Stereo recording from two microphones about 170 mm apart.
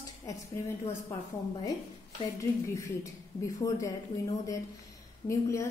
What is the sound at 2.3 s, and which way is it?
A woman's voice, 20° left (ahead or behind).